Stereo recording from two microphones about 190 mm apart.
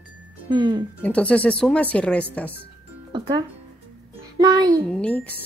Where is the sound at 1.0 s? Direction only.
5° left (ahead or behind).